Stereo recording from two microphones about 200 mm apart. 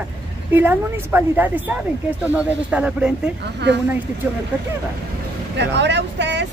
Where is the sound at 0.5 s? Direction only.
10° right (ahead or behind).